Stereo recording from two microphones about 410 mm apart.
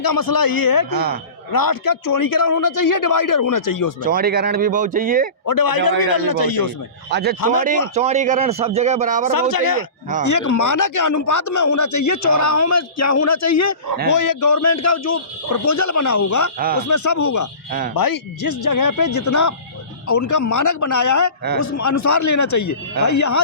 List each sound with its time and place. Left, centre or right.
0.0 s a man's voice: left
0.9 s speech: right
1.5 s a man's voice: left
4.0 s speech: right
5.5 s a man's voice: left
7.1 s a man's voice: right
9.3 s a man's voice: left
17.7 s speech: right
17.9 s a man's voice: left